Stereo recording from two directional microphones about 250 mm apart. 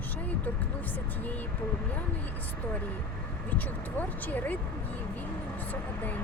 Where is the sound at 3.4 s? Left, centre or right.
Centre.